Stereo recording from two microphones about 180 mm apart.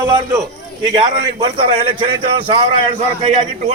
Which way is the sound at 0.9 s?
25° right (ahead or behind).